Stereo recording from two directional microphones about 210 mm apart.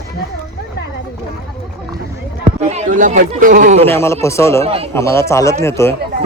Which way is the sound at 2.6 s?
35° right (ahead or behind).